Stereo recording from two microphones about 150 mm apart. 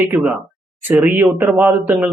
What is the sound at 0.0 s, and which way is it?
Speech, 15° right (ahead or behind).